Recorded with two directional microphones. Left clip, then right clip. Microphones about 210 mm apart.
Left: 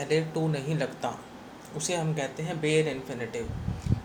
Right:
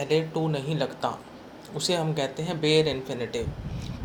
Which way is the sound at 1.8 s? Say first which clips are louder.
Right 4 dB; 30° right (ahead or behind).